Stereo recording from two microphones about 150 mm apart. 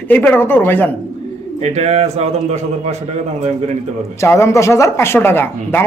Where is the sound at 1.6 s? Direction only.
50° right (ahead or behind).